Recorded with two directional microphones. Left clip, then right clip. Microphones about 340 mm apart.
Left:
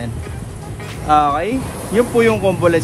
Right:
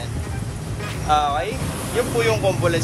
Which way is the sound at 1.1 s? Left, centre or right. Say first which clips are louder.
Left 6 dB; left.